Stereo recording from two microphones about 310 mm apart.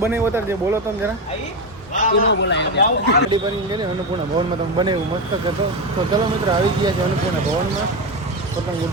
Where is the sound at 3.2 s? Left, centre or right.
Centre.